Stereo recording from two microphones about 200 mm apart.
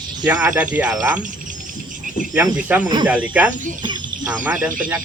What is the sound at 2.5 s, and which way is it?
Speech, 10° right (ahead or behind).